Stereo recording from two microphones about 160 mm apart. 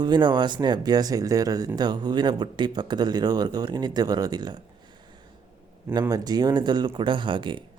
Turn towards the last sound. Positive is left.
turn(degrees=-30)  # may be behind; listen again after turning